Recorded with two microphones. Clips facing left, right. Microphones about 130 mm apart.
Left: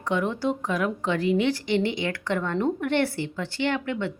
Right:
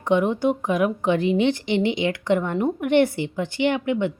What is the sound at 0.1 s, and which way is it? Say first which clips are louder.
A woman's voice: right 6 dB; 20° right (ahead or behind).